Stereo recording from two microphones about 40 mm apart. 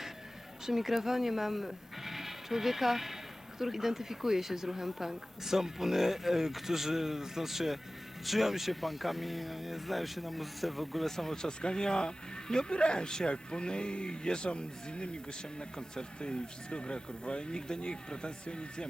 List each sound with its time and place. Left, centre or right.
0.6 s speech: centre
11.4 s speech: centre